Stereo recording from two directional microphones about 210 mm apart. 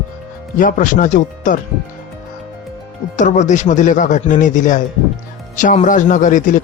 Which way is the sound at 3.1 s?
35° left (ahead or behind).